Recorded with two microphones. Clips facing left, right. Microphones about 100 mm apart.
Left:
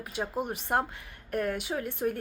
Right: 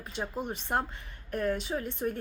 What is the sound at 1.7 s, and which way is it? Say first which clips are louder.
Speech: left 1 dB; 15° left (ahead or behind).